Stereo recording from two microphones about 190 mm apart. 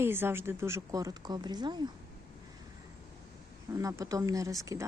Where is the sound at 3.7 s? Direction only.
15° right (ahead or behind).